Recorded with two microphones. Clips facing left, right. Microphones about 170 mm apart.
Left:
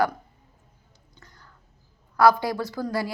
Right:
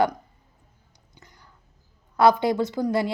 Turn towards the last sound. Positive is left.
turn(degrees=-20)  # may be behind; listen again after turning